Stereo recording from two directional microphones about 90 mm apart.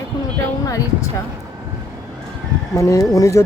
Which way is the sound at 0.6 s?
40° left (ahead or behind).